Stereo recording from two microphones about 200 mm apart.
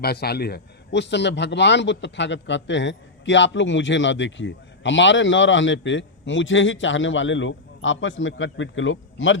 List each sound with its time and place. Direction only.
0.0 s a man's voice: 50° left (ahead or behind); by 9.4 s 75° left (ahead or behind)